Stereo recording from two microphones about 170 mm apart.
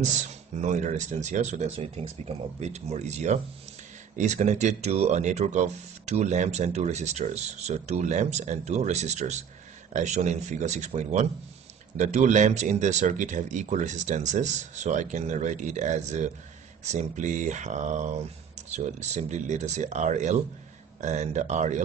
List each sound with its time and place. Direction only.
0.0 s speech: 45° right (ahead or behind)